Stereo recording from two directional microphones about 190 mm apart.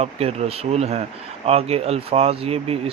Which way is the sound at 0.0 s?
35° right (ahead or behind).